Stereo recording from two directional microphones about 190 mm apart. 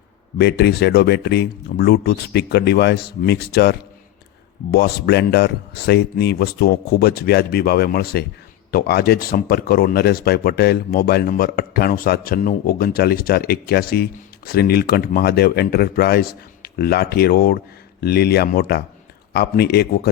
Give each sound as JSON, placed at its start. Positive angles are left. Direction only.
{"t": 0.3, "sound": "speech", "side_deg": 60}